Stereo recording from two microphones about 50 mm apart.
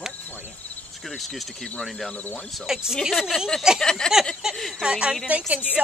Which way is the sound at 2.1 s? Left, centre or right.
Left.